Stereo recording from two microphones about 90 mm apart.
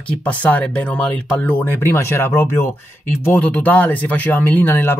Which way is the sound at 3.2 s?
15° left (ahead or behind).